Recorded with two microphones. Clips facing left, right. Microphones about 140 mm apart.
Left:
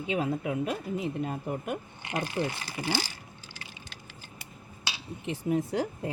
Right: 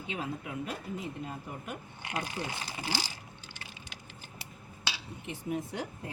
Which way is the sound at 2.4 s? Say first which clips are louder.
Left 11 dB; 75° left (ahead or behind).